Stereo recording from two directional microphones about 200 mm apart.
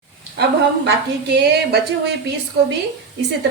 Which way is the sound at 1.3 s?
55° right (ahead or behind).